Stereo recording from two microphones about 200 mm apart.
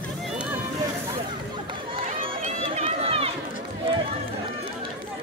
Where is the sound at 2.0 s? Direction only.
25° right (ahead or behind).